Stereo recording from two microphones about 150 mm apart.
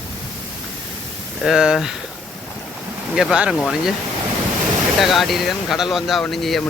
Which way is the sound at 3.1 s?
5° right (ahead or behind).